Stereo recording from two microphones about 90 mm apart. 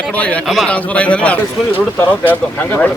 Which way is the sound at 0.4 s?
Centre (ahead or behind).